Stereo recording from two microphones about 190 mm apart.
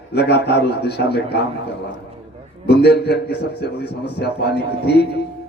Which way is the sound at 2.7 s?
60° left (ahead or behind).